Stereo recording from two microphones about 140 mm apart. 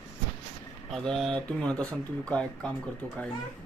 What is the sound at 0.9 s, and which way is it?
Speech, centre (ahead or behind).